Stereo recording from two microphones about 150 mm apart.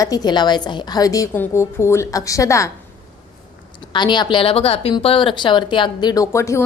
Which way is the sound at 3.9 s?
30° left (ahead or behind).